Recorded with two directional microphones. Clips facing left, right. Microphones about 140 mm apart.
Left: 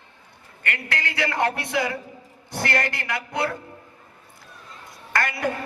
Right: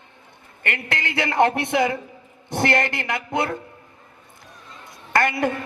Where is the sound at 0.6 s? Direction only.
25° right (ahead or behind).